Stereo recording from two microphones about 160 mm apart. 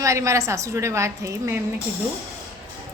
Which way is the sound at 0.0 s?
20° right (ahead or behind).